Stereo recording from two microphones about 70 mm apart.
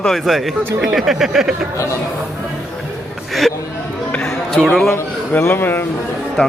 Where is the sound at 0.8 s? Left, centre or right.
Centre.